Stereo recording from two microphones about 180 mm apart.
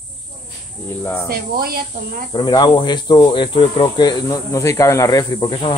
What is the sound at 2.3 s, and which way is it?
Speech, 25° left (ahead or behind).